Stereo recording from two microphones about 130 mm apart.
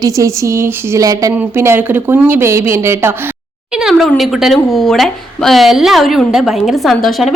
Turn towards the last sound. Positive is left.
turn(degrees=0)  # may be behind; listen again after turning